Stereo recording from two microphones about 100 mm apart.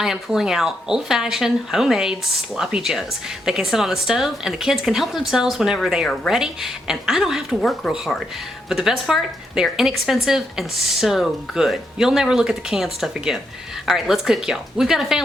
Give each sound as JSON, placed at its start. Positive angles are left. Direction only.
{"t": 0.0, "sound": "speech", "side_deg": -5}